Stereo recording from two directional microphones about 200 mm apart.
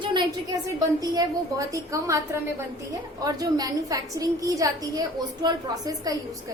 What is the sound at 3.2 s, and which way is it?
A woman's voice, 20° right (ahead or behind).